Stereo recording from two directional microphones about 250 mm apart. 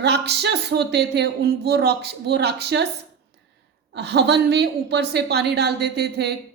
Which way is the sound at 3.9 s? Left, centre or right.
Right.